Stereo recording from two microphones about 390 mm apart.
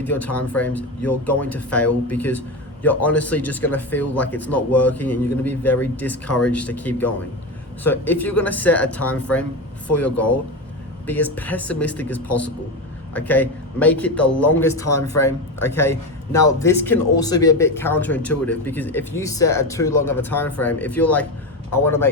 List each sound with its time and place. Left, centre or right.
0.0 s speech: centre
11.0 s a man's voice: centre
14.8 s speech: left
15.6 s a man's voice: centre